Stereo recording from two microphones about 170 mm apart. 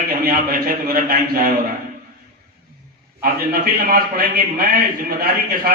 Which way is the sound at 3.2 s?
60° right (ahead or behind).